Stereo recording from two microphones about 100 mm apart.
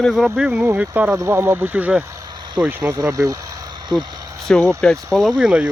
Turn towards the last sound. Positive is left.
turn(degrees=-10)  # may be behind; listen again after turning